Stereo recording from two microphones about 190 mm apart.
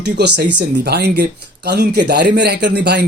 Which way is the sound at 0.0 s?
60° right (ahead or behind).